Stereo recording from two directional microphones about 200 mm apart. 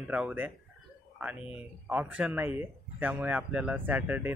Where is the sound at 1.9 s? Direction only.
10° right (ahead or behind).